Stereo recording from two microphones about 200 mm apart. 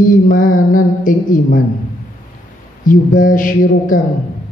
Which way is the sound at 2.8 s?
40° left (ahead or behind).